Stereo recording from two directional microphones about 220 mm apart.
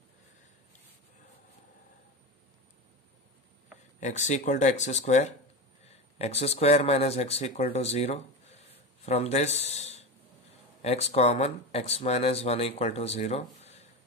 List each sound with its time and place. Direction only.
4.0 s speech: 30° left (ahead or behind)